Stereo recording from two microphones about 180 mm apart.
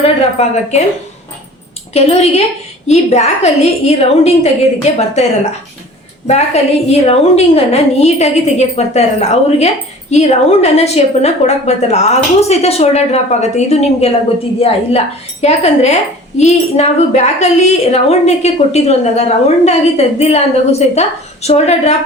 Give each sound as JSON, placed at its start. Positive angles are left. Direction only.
{"t": 0.0, "sound": "a woman's voice", "side_deg": 35}
{"t": 1.9, "sound": "a woman's voice", "side_deg": 35}
{"t": 6.2, "sound": "a woman's voice", "side_deg": 35}